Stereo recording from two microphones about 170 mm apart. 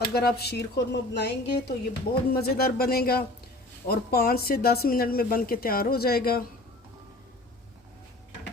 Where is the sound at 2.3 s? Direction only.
60° left (ahead or behind).